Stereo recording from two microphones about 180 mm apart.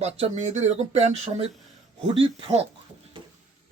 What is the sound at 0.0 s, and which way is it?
Speech, 40° right (ahead or behind).